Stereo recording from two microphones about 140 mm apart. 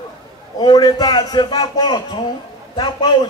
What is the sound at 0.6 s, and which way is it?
A man's voice, 25° left (ahead or behind).